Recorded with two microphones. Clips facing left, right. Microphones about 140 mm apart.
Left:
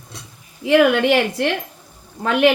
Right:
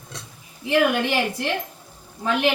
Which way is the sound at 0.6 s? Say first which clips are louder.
Left 6 dB; 75° left (ahead or behind).